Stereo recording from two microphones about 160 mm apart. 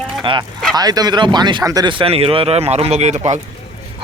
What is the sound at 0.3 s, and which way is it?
Speech, 30° right (ahead or behind).